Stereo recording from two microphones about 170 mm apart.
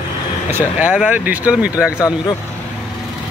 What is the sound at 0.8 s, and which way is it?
Speech, 10° right (ahead or behind).